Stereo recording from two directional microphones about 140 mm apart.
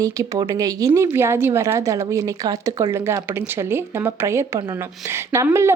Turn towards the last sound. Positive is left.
turn(degrees=-20)  # may be behind; listen again after turning